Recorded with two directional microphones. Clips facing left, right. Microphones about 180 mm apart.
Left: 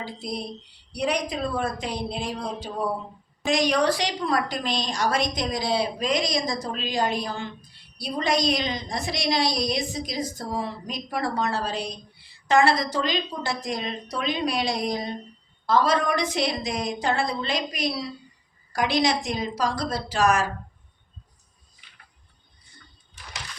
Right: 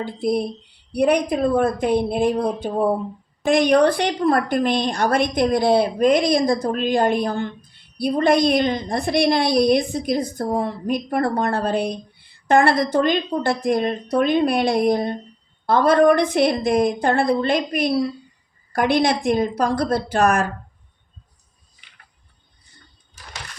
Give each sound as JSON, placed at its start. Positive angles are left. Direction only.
{"t": 0.0, "sound": "a woman's voice", "side_deg": -55}